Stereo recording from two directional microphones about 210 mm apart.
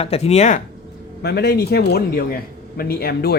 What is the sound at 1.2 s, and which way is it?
A man's voice, 50° left (ahead or behind).